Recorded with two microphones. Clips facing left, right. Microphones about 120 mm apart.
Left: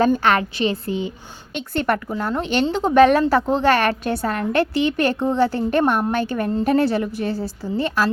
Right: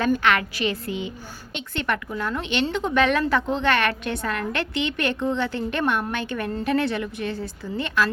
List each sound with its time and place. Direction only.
0.0 s a woman's voice: 35° left (ahead or behind)